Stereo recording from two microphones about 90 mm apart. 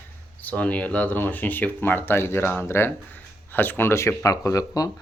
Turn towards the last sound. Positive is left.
turn(degrees=40)  # may be behind; listen again after turning